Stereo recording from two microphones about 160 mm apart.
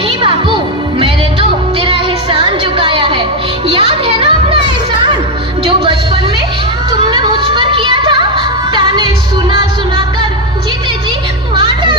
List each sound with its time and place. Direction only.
0.9 s music: 35° right (ahead or behind)
3.7 s children playing: 35° right (ahead or behind)
5.6 s music: 35° right (ahead or behind)
7.1 s music: 30° right (ahead or behind)
11.6 s music: 30° right (ahead or behind)